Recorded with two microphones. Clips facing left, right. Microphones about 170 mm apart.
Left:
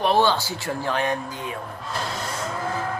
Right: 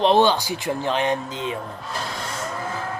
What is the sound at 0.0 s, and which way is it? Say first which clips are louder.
Speech: right 3 dB; 20° right (ahead or behind).